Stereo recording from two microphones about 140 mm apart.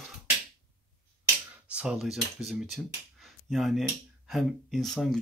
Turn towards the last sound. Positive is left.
turn(degrees=0)  # may be behind; listen again after turning